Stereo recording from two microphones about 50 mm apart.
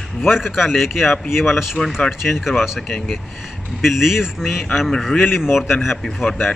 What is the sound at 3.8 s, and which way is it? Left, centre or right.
Speech, centre.